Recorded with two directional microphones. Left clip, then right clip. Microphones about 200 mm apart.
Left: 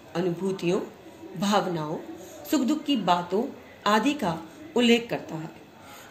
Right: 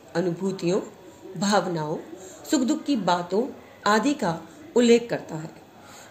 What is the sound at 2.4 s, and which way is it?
A woman's voice, 50° right (ahead or behind).